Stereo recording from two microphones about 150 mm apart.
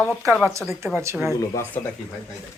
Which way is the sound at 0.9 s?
15° right (ahead or behind).